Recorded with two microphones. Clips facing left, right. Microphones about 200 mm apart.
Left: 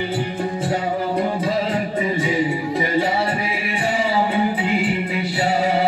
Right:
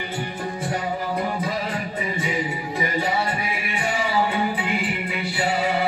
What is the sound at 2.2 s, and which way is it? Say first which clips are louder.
Music: left 6 dB; 30° left (ahead or behind).